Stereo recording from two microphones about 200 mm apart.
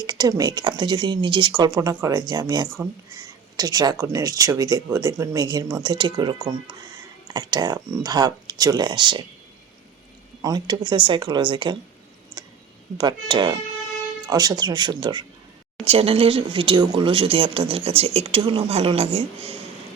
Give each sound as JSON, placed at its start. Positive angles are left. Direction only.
{"t": 0.0, "sound": "speech", "side_deg": -20}
{"t": 10.4, "sound": "speech", "side_deg": -20}
{"t": 13.0, "sound": "speech", "side_deg": -20}